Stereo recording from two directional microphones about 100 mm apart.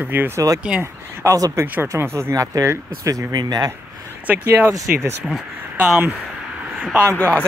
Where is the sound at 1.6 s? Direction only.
20° right (ahead or behind); by 3.7 s 45° right (ahead or behind).